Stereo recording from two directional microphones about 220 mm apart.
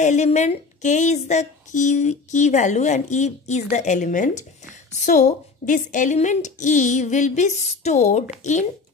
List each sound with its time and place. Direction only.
0.0 s speech: 30° left (ahead or behind)